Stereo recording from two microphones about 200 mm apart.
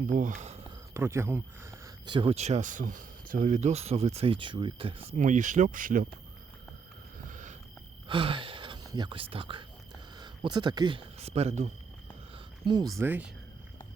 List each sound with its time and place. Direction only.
0.1 s speech: 40° right (ahead or behind)
0.9 s speech: 15° right (ahead or behind); by 6.1 s 45° right (ahead or behind)
7.3 s a sound: 40° right (ahead or behind)
8.0 s speech: 25° right (ahead or behind)
12.6 s speech: 20° right (ahead or behind)
13.0 s speech: 10° right (ahead or behind)